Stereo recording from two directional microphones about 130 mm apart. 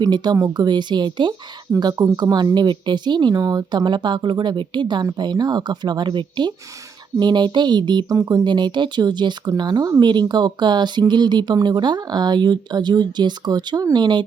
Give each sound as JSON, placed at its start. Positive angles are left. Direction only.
{"t": 0.0, "sound": "speech", "side_deg": -35}